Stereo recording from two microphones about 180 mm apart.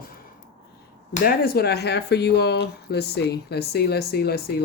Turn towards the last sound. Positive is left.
turn(degrees=60)  # may be behind; listen again after turning